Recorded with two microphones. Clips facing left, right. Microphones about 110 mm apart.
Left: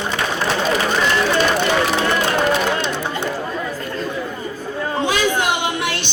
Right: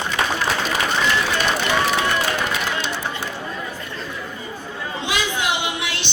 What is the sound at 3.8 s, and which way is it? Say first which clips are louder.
Chatter: left 7 dB; 45° left (ahead or behind).